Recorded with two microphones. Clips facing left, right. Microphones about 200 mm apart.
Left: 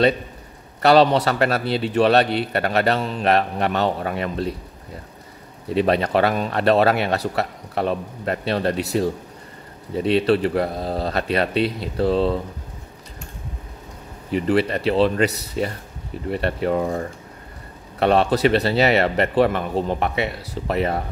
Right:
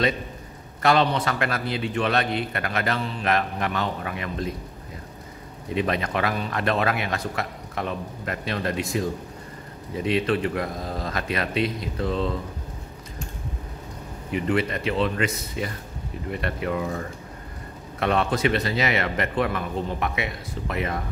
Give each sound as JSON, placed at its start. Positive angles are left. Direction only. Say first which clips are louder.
{"t": 0.8, "sound": "a man's voice", "louder": "left 6 dB", "side_deg": 35}
{"t": 5.8, "sound": "a man's voice", "louder": "left 7 dB", "side_deg": 35}
{"t": 14.3, "sound": "a man's voice", "louder": "left 5 dB", "side_deg": 35}